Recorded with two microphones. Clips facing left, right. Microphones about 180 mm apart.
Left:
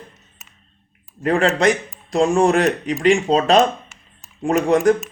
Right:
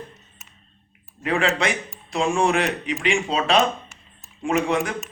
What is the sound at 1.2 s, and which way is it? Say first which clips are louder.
Speech: left 6 dB; 40° left (ahead or behind).